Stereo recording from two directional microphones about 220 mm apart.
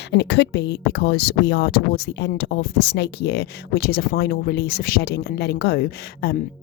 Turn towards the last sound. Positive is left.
turn(degrees=45)  # may be behind; listen again after turning